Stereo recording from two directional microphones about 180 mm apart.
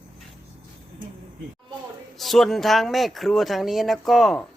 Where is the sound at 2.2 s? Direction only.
Centre (ahead or behind).